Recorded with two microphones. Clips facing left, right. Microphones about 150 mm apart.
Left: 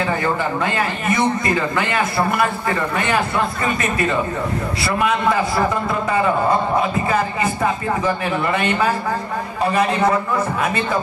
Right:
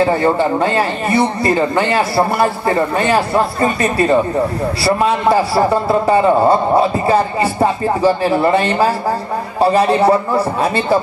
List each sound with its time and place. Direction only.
0.0 s a man's voice: 30° right (ahead or behind)